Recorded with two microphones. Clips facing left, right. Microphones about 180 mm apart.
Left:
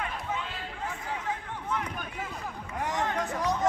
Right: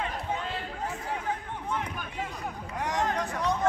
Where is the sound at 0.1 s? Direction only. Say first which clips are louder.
Right 2 dB; 40° right (ahead or behind).